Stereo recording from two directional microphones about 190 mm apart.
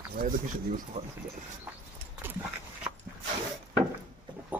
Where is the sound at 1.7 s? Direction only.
10° right (ahead or behind).